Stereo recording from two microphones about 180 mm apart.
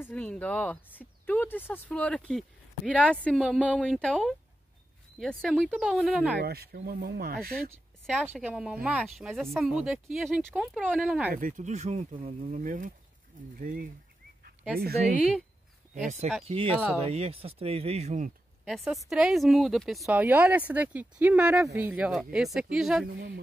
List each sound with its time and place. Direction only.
0.0 s speech: 5° left (ahead or behind)
6.4 s speech: 60° right (ahead or behind)
8.1 s speech: 10° right (ahead or behind)
11.3 s speech: 45° right (ahead or behind)
12.5 s speech: 50° right (ahead or behind)
16.4 s speech: 30° right (ahead or behind)
16.7 s speech: 5° right (ahead or behind)
17.0 s speech: 35° right (ahead or behind)
19.0 s speech: centre (ahead or behind)
23.1 s speech: 60° right (ahead or behind)